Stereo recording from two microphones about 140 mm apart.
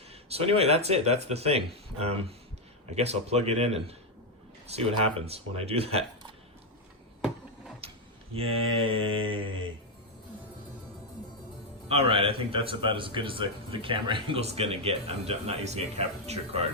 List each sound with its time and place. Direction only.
0.1 s a man's voice: 45° right (ahead or behind)
8.3 s speech: 40° right (ahead or behind)
11.9 s a man's voice: 45° right (ahead or behind)